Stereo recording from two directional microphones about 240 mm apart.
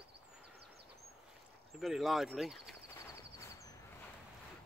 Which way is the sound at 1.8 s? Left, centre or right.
Centre.